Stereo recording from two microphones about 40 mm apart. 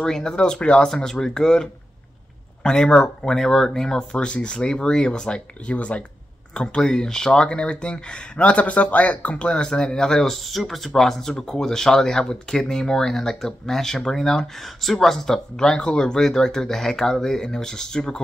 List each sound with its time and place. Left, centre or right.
0.0 s speech: centre
0.8 s speech: centre; by 6.0 s left
6.5 s speech: left
9.5 s speech: centre
10.3 s speech: centre